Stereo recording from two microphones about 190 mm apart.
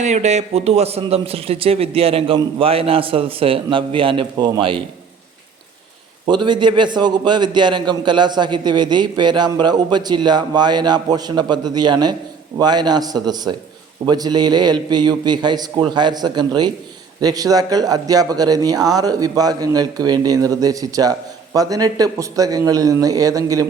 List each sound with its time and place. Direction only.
0.0 s speech: 35° right (ahead or behind)
6.2 s speech: 25° right (ahead or behind)